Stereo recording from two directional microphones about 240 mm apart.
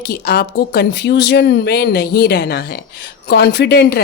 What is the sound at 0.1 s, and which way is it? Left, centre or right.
A woman's voice, left.